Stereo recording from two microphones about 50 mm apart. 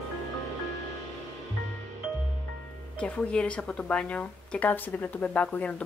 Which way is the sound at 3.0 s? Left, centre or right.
Left.